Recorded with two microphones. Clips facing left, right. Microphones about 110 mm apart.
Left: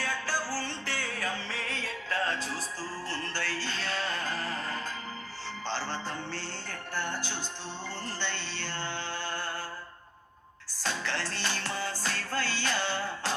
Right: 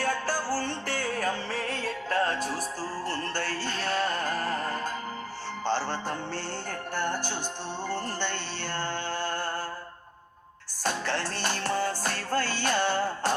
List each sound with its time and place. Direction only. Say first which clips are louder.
0.0 s music: right 4 dB; 45° right (ahead or behind)
7.9 s mantra: right 5 dB; 50° right (ahead or behind)
10.8 s music: right 4 dB; 50° right (ahead or behind)